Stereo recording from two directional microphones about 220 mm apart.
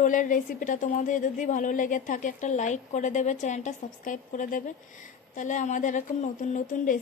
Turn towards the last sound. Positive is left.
turn(degrees=35)  # may be behind; listen again after turning